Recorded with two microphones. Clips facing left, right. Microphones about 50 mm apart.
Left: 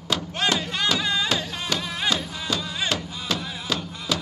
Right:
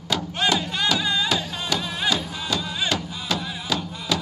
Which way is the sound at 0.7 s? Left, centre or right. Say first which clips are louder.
Right 1 dB; left.